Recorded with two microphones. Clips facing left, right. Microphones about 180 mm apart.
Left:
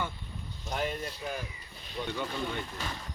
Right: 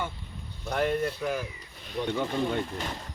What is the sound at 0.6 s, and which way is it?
Speech, 60° right (ahead or behind).